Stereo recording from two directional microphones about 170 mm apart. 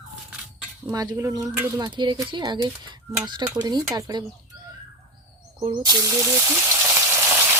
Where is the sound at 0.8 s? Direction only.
20° right (ahead or behind).